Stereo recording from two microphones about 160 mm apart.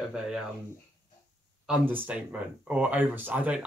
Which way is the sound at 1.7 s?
10° right (ahead or behind).